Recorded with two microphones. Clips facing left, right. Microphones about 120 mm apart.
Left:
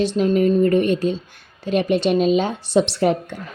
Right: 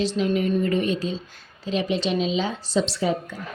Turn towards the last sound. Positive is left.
turn(degrees=65)  # may be behind; listen again after turning